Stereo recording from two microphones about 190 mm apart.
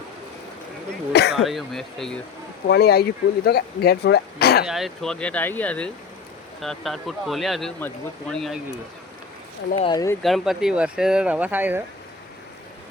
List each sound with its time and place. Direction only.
1.1 s speech: 60° left (ahead or behind)
1.5 s speech: centre (ahead or behind)
2.6 s speech: 55° left (ahead or behind)
4.6 s speech: centre (ahead or behind)
9.7 s speech: 25° left (ahead or behind)
10.2 s speech: centre (ahead or behind)